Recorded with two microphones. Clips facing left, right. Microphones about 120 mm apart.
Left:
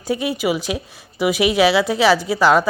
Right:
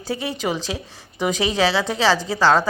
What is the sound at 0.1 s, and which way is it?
A woman's voice, 15° left (ahead or behind).